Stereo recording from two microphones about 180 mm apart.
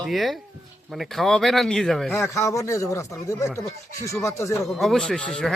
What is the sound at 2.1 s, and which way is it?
Speech, 15° left (ahead or behind).